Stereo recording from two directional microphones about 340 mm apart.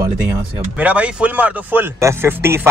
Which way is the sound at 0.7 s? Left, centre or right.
Centre.